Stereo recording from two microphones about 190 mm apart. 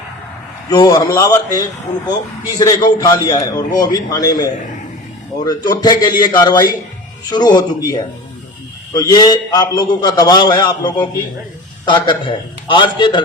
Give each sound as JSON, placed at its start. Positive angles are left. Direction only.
{"t": 0.7, "sound": "a man's voice", "side_deg": 20}
{"t": 9.0, "sound": "a man's voice", "side_deg": 20}